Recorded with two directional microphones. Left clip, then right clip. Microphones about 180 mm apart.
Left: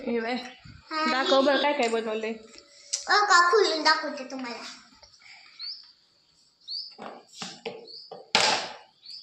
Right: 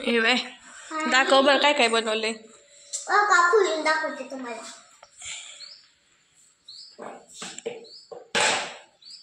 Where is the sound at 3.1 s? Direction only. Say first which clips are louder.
Right 1 dB; 25° left (ahead or behind).